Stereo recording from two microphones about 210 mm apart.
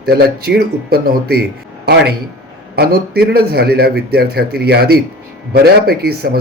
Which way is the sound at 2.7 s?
45° right (ahead or behind).